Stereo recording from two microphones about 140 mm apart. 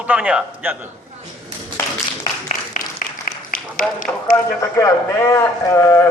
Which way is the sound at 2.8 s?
65° left (ahead or behind).